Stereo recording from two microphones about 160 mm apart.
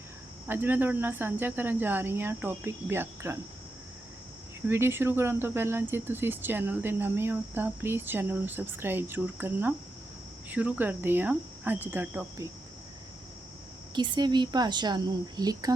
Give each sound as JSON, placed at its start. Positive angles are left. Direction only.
{"t": 0.4, "sound": "speech", "side_deg": -10}
{"t": 4.7, "sound": "speech", "side_deg": -15}
{"t": 13.9, "sound": "speech", "side_deg": -30}